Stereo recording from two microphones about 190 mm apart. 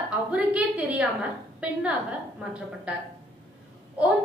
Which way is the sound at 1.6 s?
5° right (ahead or behind).